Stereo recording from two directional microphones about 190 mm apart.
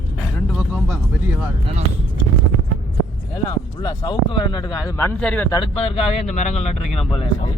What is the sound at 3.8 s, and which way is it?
Speech, 20° left (ahead or behind).